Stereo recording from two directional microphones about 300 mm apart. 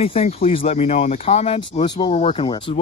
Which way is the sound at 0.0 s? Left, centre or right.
Centre.